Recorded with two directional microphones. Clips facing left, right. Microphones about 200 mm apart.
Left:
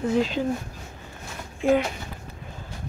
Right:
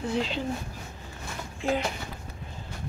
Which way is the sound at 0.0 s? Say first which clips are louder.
Left 6 dB; 45° left (ahead or behind).